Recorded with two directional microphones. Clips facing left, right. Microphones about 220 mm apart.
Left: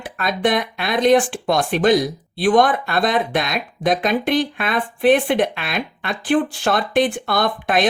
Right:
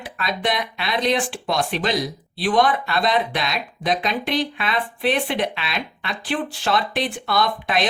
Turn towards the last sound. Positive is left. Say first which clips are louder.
# left 3 dB
turn(degrees=50)  # may be behind; listen again after turning